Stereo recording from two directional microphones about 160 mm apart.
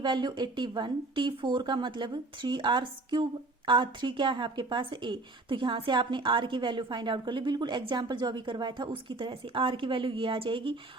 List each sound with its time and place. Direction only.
0.0 s a woman's voice: 30° right (ahead or behind)